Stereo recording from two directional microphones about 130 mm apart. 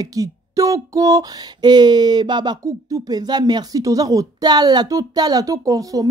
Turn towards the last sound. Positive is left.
turn(degrees=-25)  # may be behind; listen again after turning